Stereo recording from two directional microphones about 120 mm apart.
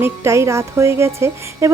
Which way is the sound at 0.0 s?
25° right (ahead or behind).